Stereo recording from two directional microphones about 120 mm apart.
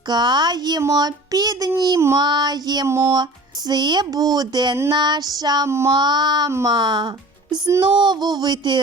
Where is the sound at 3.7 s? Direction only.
35° right (ahead or behind).